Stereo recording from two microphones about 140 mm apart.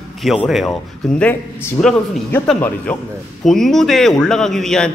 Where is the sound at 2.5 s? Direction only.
10° left (ahead or behind).